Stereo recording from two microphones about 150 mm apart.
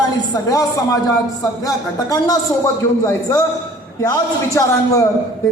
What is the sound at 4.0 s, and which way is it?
A man's voice, 20° left (ahead or behind).